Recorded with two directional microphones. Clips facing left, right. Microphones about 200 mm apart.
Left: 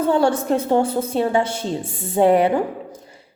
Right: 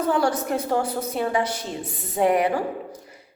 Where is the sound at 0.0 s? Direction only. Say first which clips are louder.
Left 4 dB; 25° left (ahead or behind).